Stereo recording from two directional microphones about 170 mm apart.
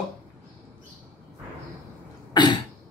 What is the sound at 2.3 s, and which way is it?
Cough, 25° left (ahead or behind).